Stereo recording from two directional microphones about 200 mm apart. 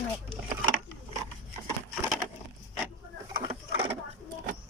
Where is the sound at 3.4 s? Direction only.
30° right (ahead or behind).